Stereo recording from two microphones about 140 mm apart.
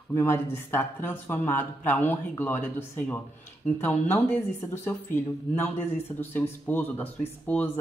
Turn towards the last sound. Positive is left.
turn(degrees=10)  # may be behind; listen again after turning